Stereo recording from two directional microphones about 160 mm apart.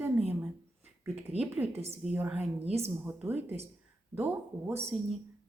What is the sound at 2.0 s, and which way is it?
A woman's voice, 5° right (ahead or behind).